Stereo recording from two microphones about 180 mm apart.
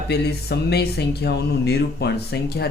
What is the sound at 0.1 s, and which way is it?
Speech, 65° left (ahead or behind).